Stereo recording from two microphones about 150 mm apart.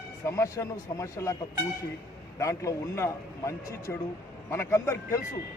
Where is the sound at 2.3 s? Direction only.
20° left (ahead or behind).